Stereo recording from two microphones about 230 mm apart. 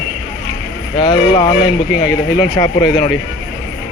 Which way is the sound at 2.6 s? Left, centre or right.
Centre.